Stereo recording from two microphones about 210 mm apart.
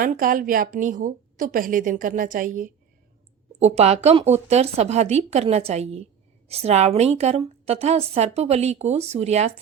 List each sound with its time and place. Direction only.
0.0 s a woman's voice: 40° right (ahead or behind)